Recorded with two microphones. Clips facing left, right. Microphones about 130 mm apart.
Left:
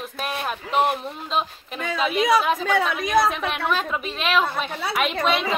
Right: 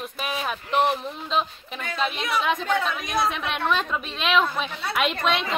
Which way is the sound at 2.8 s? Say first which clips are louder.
Left 5 dB; 70° left (ahead or behind).